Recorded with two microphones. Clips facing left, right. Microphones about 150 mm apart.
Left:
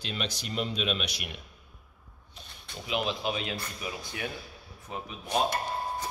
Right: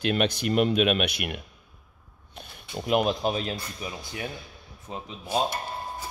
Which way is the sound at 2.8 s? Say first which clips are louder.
Right 7 dB; 50° right (ahead or behind).